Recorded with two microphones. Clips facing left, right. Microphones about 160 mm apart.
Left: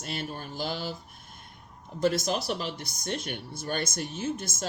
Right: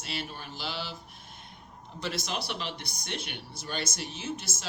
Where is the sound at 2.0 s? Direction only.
45° left (ahead or behind).